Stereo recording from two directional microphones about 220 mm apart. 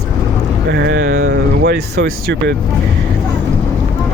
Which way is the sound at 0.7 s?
55° right (ahead or behind).